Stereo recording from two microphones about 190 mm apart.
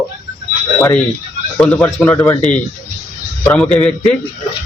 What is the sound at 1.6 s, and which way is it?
Speech, 10° left (ahead or behind).